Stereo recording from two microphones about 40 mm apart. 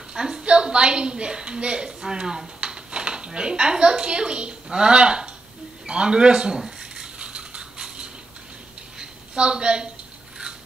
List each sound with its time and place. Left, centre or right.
0.1 s a woman's voice: centre
6.6 s dishes: centre
9.0 s a sound: right